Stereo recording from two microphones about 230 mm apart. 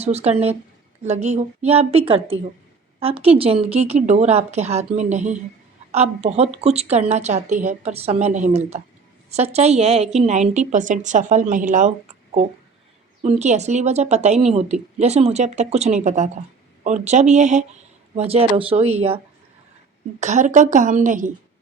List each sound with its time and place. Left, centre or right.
0.0 s a woman's voice: right
13.2 s a woman's voice: right